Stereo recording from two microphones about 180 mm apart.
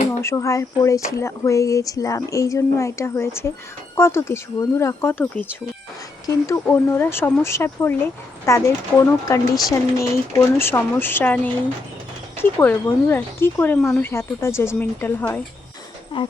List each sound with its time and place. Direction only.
0.2 s speech: 15° left (ahead or behind)
16.1 s speech: 25° left (ahead or behind)